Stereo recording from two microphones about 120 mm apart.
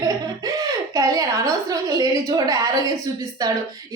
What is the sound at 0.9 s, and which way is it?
A woman's voice, 30° right (ahead or behind).